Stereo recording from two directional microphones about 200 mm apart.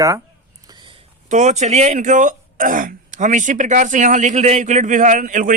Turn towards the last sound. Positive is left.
turn(degrees=-45)  # may be behind; listen again after turning